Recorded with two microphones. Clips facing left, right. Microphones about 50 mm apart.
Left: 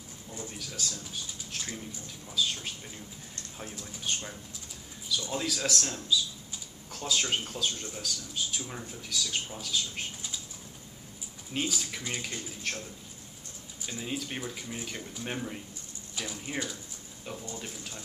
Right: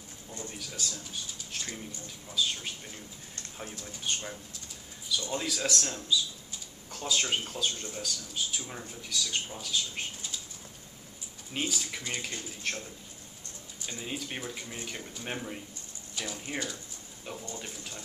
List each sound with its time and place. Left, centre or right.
0.3 s a sound: centre
0.6 s speech: centre
11.5 s speech: centre
13.8 s speech: centre